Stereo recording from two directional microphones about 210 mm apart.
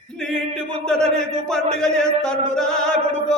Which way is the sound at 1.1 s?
30° right (ahead or behind).